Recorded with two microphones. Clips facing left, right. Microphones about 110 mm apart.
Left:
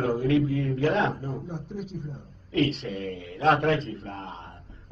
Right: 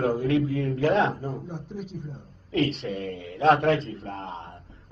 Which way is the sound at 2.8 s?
35° right (ahead or behind).